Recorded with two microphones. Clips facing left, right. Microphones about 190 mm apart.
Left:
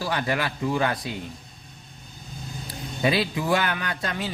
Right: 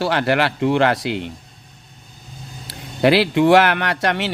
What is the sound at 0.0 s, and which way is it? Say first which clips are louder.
A man's voice: right 8 dB; 75° right (ahead or behind).